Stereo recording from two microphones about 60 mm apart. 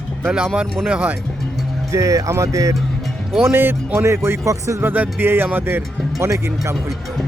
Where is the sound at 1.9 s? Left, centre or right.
Right.